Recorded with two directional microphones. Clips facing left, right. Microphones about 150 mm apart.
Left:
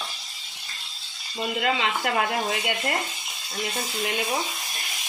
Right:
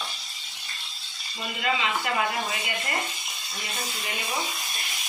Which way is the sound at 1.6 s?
60° left (ahead or behind).